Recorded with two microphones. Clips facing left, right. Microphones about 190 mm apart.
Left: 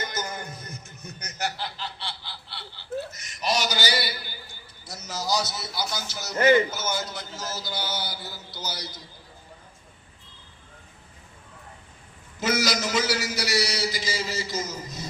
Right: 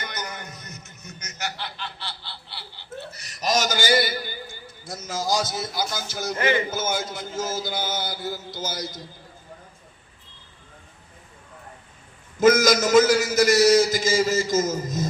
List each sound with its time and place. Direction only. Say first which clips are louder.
0.0 s a sound: left 2 dB; 30° left (ahead or behind)
2.7 s a man's voice: left 6 dB; 30° right (ahead or behind); by 9.0 s 45° right (ahead or behind)
12.4 s a man's voice: right 9 dB; 45° right (ahead or behind)